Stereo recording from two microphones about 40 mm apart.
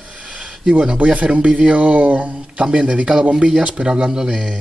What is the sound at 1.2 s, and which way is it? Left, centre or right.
Speech, right.